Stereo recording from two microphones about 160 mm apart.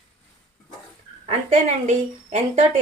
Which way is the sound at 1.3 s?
45° right (ahead or behind).